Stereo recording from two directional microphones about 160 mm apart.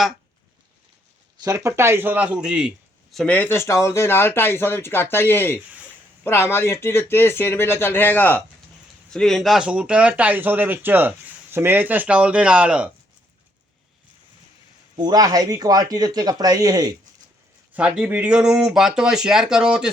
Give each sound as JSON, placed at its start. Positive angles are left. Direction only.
{"t": 1.4, "sound": "a man's voice", "side_deg": -20}
{"t": 14.9, "sound": "speech", "side_deg": -25}
{"t": 17.7, "sound": "speech", "side_deg": -5}